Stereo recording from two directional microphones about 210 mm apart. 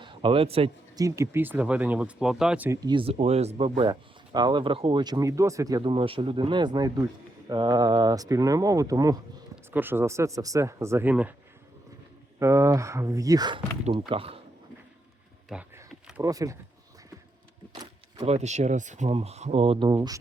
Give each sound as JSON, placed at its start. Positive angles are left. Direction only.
{"t": 0.0, "sound": "speech", "side_deg": -25}
{"t": 1.0, "sound": "speech", "side_deg": -15}
{"t": 2.8, "sound": "speech", "side_deg": -25}
{"t": 12.4, "sound": "speech", "side_deg": -15}
{"t": 15.4, "sound": "a sound", "side_deg": -5}
{"t": 16.2, "sound": "speech", "side_deg": -15}
{"t": 18.2, "sound": "speech", "side_deg": -30}